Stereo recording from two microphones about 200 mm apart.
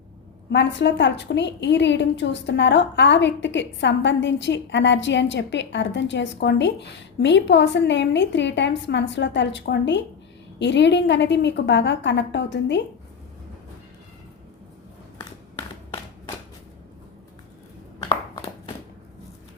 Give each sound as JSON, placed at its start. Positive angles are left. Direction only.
{"t": 0.5, "sound": "a woman's voice", "side_deg": 60}